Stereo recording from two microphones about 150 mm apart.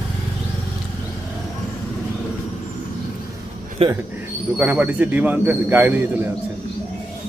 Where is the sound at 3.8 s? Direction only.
40° right (ahead or behind).